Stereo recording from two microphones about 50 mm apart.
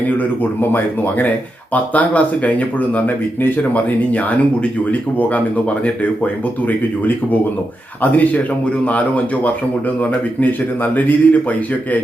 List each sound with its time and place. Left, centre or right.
0.6 s speech: left
1.7 s speech: left
6.7 s speech: left
10.9 s speech: left